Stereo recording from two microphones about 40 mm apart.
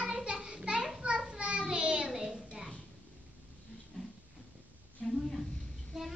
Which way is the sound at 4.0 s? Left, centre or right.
Left.